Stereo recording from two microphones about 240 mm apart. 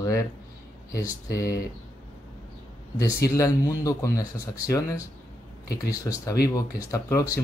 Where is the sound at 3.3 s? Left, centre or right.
Centre.